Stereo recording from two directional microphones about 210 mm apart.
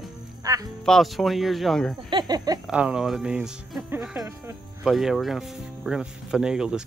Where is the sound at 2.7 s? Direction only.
5° right (ahead or behind).